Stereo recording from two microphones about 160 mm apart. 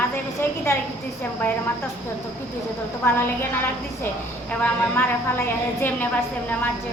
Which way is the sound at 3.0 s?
15° left (ahead or behind).